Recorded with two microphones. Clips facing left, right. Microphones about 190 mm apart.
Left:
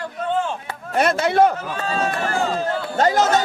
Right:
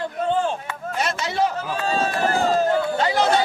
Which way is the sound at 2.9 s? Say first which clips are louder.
Left 2 dB; 45° left (ahead or behind).